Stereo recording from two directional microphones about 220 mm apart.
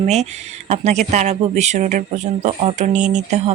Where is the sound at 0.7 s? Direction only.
30° right (ahead or behind).